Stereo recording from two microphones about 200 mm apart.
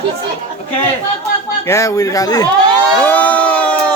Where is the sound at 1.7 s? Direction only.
15° left (ahead or behind).